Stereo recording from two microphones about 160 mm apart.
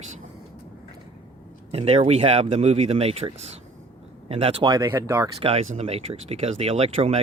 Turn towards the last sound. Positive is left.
turn(degrees=-40)  # may be behind; listen again after turning